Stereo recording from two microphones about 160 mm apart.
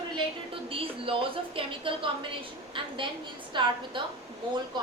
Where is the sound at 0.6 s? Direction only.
35° right (ahead or behind).